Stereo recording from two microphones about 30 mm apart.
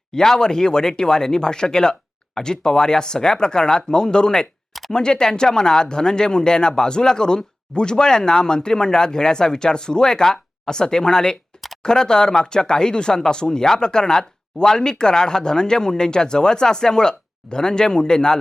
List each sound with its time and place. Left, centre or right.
0.1 s speech: centre